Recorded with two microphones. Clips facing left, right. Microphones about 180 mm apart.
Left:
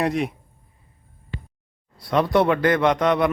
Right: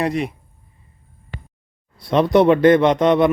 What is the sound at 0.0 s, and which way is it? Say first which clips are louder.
Speech: right 1 dB; centre (ahead or behind).